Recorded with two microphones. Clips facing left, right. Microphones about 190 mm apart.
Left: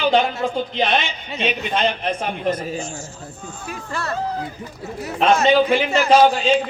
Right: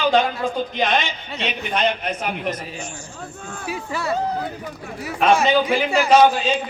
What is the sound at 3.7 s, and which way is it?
Speech, 10° right (ahead or behind).